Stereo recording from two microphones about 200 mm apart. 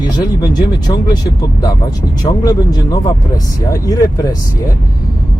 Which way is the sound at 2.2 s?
20° left (ahead or behind).